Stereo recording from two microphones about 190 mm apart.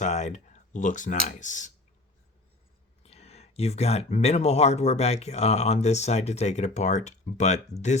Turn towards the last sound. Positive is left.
turn(degrees=35)  # may be behind; listen again after turning